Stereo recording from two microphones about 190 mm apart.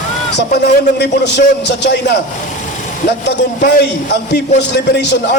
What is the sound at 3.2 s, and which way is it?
A man's voice, 65° left (ahead or behind).